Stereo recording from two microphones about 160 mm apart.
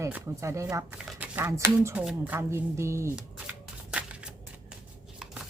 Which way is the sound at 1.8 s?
15° right (ahead or behind).